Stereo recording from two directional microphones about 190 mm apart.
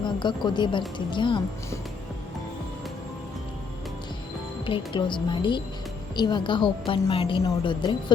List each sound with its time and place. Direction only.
0.0 s a woman's voice: 25° left (ahead or behind)
4.6 s a woman's voice: 25° left (ahead or behind)